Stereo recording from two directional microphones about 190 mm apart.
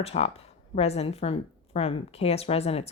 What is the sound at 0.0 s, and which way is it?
Speech, 30° left (ahead or behind).